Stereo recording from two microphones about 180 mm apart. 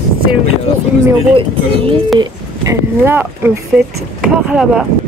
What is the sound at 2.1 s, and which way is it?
Speech, 15° right (ahead or behind).